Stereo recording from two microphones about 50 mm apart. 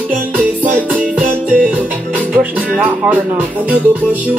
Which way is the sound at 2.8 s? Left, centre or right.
Right.